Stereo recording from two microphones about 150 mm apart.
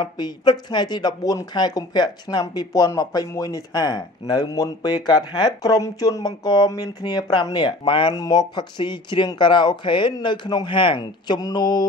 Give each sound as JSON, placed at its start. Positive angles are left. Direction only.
{"t": 0.0, "sound": "speech", "side_deg": 30}